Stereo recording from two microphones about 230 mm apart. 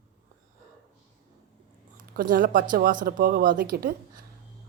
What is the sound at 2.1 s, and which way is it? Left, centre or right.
A woman's voice, right.